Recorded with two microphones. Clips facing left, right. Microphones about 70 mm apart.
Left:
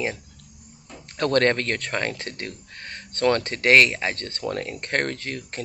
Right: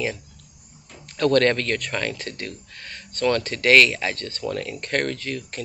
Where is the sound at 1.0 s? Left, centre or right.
Left.